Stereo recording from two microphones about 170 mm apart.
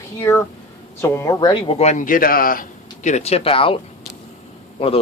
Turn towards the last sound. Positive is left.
turn(degrees=30)  # may be behind; listen again after turning